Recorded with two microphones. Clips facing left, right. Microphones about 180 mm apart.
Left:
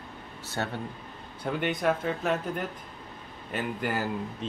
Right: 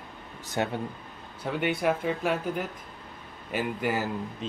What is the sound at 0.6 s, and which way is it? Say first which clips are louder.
Speech: right 4 dB; 15° right (ahead or behind).